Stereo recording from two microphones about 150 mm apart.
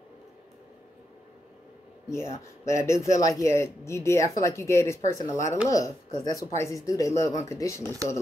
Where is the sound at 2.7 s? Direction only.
20° left (ahead or behind).